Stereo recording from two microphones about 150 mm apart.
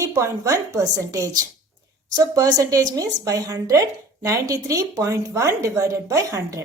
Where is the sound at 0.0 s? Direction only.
20° right (ahead or behind).